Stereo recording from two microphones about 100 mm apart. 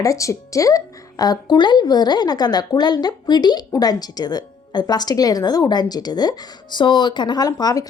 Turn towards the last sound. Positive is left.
turn(degrees=35)  # may be behind; listen again after turning